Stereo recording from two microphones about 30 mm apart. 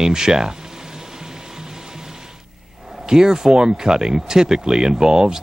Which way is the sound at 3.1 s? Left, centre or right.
Right.